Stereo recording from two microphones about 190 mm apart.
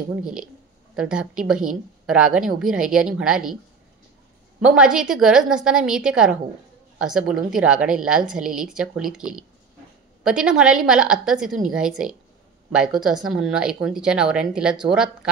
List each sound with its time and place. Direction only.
0.1 s speech: 5° right (ahead or behind)
4.6 s speech: 5° right (ahead or behind)